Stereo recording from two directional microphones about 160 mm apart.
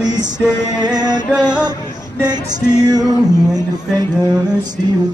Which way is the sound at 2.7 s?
25° right (ahead or behind).